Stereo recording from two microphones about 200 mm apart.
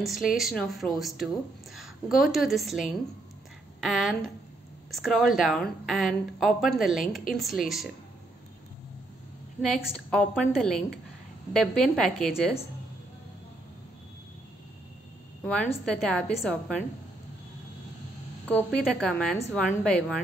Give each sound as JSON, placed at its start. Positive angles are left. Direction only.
{"t": 0.0, "sound": "a woman's voice", "side_deg": 0}
{"t": 9.6, "sound": "a woman's voice", "side_deg": 0}
{"t": 15.4, "sound": "a woman's voice", "side_deg": 5}
{"t": 18.5, "sound": "a woman's voice", "side_deg": 5}